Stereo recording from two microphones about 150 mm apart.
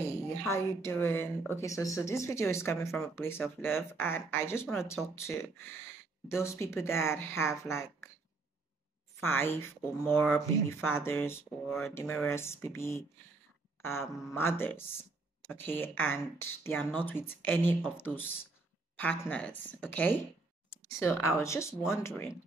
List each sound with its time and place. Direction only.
0.0 s a sound: 15° left (ahead or behind)
1.0 s speech: 15° left (ahead or behind)
9.2 s speech: 15° left (ahead or behind)